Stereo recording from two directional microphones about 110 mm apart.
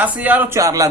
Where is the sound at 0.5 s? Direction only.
30° right (ahead or behind).